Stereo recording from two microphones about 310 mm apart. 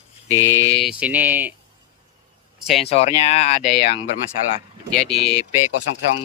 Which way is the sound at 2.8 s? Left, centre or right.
Centre.